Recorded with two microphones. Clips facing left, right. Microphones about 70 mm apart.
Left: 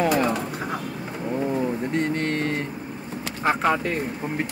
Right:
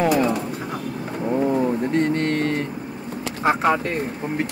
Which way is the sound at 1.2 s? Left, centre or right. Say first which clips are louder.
Right 5 dB; centre.